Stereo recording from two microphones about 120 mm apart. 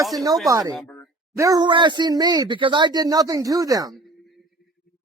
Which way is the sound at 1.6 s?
40° right (ahead or behind).